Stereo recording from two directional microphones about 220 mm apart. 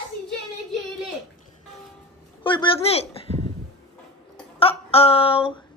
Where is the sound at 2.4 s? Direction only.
20° left (ahead or behind).